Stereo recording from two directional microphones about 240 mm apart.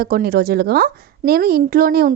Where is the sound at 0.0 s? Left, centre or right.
Right.